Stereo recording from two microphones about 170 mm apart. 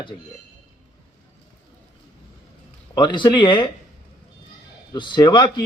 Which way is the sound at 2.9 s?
25° left (ahead or behind).